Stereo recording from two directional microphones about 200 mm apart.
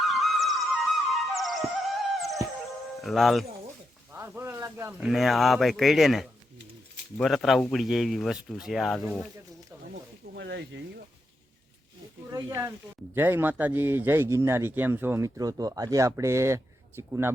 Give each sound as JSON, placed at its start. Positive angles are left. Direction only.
{"t": 0.0, "sound": "music", "side_deg": 0}
{"t": 3.0, "sound": "speech", "side_deg": 0}
{"t": 4.1, "sound": "speech", "side_deg": -10}
{"t": 9.9, "sound": "snake", "side_deg": -60}
{"t": 12.3, "sound": "a man's voice", "side_deg": -15}